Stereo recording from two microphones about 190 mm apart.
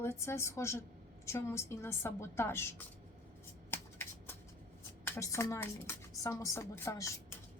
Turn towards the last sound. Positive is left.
turn(degrees=15)  # may be behind; listen again after turning